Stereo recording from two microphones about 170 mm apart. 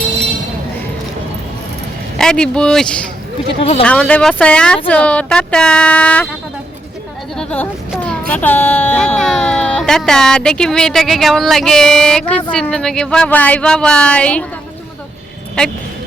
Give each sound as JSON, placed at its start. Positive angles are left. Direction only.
{"t": 2.1, "sound": "speech", "side_deg": 5}
{"t": 3.6, "sound": "speech", "side_deg": 35}
{"t": 3.8, "sound": "speech", "side_deg": 5}
{"t": 7.3, "sound": "a sound", "side_deg": 10}
{"t": 8.3, "sound": "speech", "side_deg": 10}
{"t": 15.6, "sound": "speech", "side_deg": 5}